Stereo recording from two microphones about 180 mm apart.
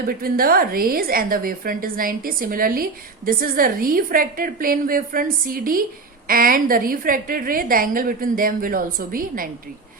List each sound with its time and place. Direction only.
0.1 s a woman's voice: 55° right (ahead or behind)